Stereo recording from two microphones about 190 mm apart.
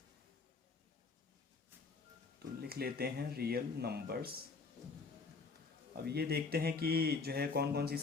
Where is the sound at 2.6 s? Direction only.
55° right (ahead or behind).